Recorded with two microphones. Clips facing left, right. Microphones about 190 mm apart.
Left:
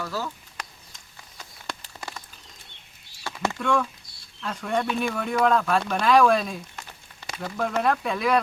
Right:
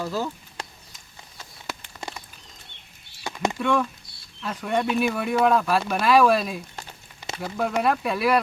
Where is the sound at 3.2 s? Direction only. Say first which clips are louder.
Right 2 dB; 15° right (ahead or behind).